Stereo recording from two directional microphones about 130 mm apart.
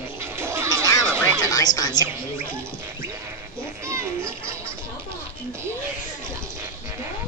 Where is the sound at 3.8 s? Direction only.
20° right (ahead or behind).